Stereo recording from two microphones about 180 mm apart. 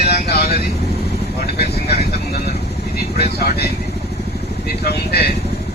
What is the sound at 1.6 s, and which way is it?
Speech, 65° left (ahead or behind).